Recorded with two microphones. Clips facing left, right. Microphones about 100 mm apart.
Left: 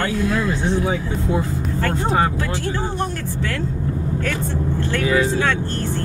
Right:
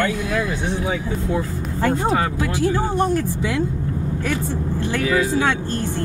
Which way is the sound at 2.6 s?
15° right (ahead or behind).